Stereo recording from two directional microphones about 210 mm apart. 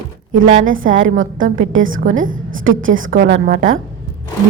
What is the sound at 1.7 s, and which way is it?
Speech, 70° right (ahead or behind).